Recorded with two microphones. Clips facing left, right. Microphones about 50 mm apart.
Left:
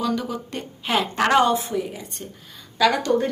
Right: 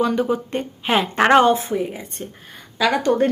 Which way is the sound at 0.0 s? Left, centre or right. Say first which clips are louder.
Right 6 dB; right.